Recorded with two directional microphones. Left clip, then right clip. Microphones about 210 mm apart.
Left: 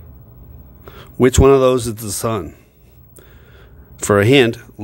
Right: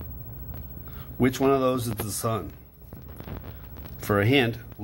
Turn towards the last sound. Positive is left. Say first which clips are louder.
# left 10 dB
turn(degrees=50)  # may be behind; listen again after turning